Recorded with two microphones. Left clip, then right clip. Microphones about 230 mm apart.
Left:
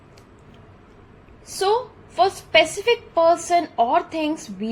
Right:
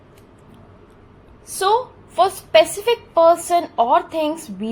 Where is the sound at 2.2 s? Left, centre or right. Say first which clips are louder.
Right 3 dB; centre.